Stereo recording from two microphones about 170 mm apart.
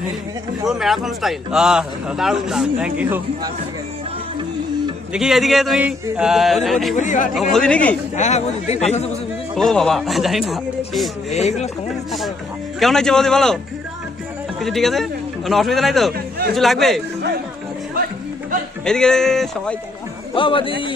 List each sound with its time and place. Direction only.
0.7 s a man's voice: centre (ahead or behind)
5.1 s a man's voice: centre (ahead or behind)
7.0 s speech: 50° left (ahead or behind)
7.3 s a man's voice: 5° left (ahead or behind)
8.2 s a man's voice: 40° left (ahead or behind)
9.6 s a man's voice: centre (ahead or behind)
11.3 s a man's voice: 40° left (ahead or behind)
12.8 s a man's voice: 5° left (ahead or behind)
14.6 s a man's voice: centre (ahead or behind)
18.9 s a man's voice: 5° left (ahead or behind)
20.3 s a man's voice: 30° left (ahead or behind)